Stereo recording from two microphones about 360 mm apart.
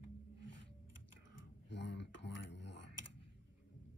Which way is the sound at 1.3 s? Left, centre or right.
Left.